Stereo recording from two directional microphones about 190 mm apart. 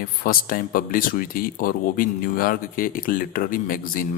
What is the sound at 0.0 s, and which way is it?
Speech, 50° left (ahead or behind).